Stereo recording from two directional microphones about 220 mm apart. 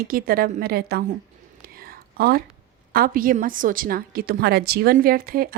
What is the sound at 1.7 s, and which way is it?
Whispering, 45° right (ahead or behind).